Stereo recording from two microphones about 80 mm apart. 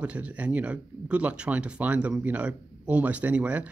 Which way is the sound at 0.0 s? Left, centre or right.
Centre.